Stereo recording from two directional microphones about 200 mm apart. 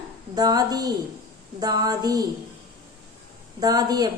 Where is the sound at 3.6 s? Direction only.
20° right (ahead or behind).